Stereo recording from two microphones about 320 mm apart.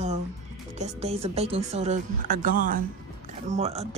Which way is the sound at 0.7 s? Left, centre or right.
Centre.